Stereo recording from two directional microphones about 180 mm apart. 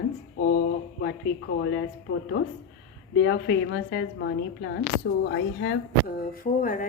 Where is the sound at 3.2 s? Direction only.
70° left (ahead or behind); by 5.7 s 85° left.